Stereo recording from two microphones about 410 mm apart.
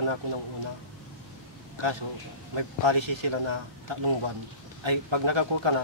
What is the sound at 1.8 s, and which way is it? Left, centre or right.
A man's voice, right.